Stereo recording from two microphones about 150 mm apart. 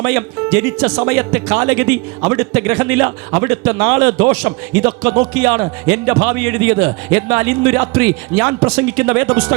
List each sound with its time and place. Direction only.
0.0 s a man's voice: 25° right (ahead or behind)